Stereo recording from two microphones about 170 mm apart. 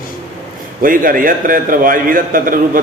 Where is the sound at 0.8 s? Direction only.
55° right (ahead or behind).